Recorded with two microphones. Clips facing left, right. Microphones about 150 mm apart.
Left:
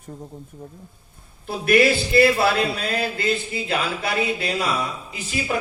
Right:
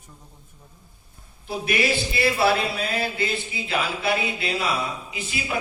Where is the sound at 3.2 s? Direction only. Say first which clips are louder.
Left 4 dB; 40° left (ahead or behind).